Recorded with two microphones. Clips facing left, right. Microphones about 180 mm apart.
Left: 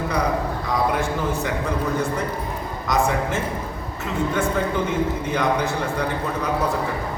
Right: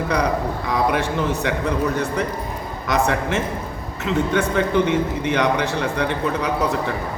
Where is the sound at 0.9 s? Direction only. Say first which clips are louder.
Right 2 dB; 70° right (ahead or behind).